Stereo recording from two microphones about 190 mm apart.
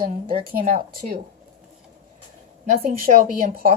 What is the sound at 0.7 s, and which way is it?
Speech, 50° right (ahead or behind).